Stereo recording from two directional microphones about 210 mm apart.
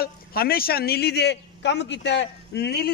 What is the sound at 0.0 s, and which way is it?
A man's voice, 45° left (ahead or behind).